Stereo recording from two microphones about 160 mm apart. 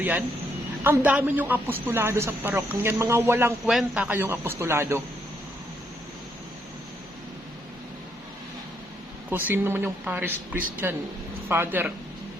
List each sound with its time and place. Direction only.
0.0 s a man's voice: 10° right (ahead or behind)
9.3 s a man's voice: 15° right (ahead or behind)